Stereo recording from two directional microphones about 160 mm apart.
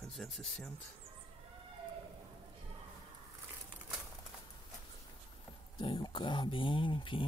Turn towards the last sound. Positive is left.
turn(degrees=30)  # may be behind; listen again after turning